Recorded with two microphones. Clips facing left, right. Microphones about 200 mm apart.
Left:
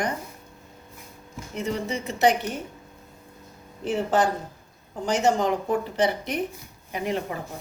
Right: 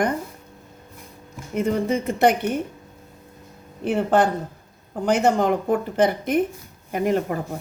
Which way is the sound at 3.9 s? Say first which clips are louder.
Right 4 dB; 60° right (ahead or behind).